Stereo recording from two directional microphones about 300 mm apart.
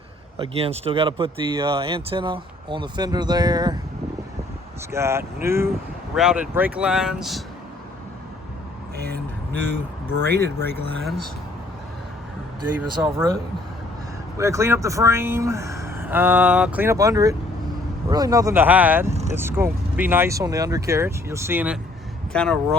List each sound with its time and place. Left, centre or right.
0.3 s speech: centre
4.9 s speech: centre
9.0 s vehicle: right
10.2 s speech: centre
13.0 s speech: centre